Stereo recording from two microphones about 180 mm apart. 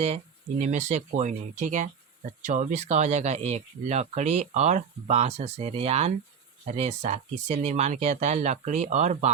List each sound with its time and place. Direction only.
0.6 s speech: 40° right (ahead or behind)